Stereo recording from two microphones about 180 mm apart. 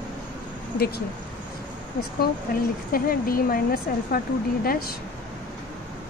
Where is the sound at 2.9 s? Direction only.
55° left (ahead or behind).